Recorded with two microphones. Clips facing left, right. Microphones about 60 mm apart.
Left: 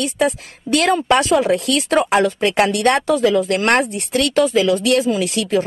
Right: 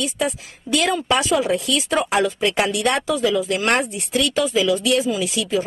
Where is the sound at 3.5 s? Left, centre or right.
Centre.